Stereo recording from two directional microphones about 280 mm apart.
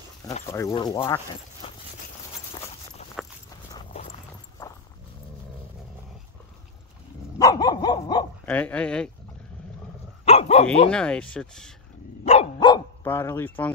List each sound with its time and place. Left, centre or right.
0.5 s speech: centre
1.6 s clip-clop: left
3.7 s horse: left
7.3 s dog: centre
10.2 s speech: left
10.9 s speech: centre
12.3 s dog: centre